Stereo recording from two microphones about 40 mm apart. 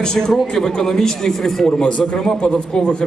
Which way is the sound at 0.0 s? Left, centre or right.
Centre.